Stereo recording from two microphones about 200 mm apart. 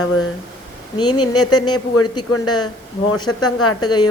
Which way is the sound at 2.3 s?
90° left.